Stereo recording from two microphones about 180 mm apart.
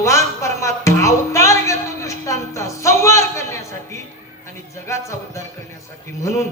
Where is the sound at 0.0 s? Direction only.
15° left (ahead or behind).